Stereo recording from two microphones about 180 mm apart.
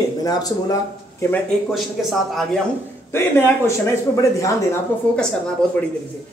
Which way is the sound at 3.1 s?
15° left (ahead or behind).